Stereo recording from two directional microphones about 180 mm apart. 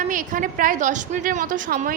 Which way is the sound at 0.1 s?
50° right (ahead or behind).